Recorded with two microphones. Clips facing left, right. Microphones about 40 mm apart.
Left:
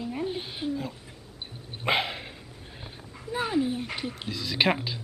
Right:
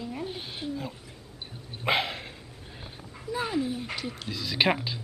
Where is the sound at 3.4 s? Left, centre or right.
Centre.